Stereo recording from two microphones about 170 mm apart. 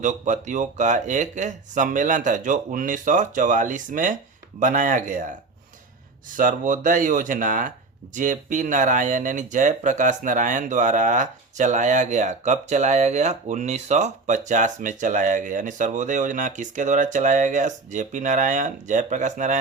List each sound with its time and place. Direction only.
0.0 s speech: 45° right (ahead or behind)
6.3 s speech: 50° right (ahead or behind)